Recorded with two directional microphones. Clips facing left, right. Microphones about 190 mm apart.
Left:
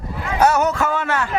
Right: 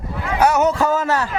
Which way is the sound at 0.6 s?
35° right (ahead or behind).